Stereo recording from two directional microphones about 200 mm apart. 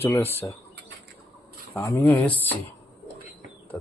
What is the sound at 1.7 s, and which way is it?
Speech, 10° left (ahead or behind).